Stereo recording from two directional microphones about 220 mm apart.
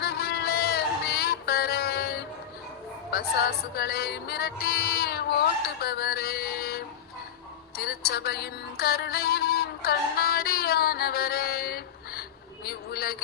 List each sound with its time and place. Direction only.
0.0 s music: 50° left (ahead or behind)
3.8 s music: 45° left (ahead or behind)
5.8 s mantra: 45° left (ahead or behind)
7.8 s music: 45° left (ahead or behind)
12.6 s vehicle: 45° left (ahead or behind)